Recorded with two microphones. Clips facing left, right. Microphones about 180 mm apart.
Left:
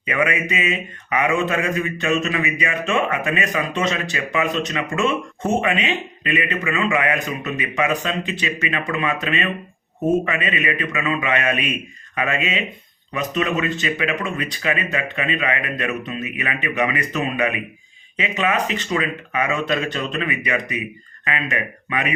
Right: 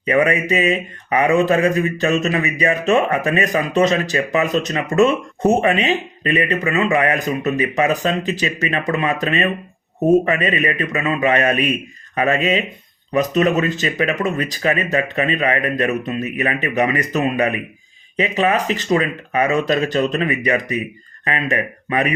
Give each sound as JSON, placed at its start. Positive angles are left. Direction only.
{"t": 0.0, "sound": "speech", "side_deg": -35}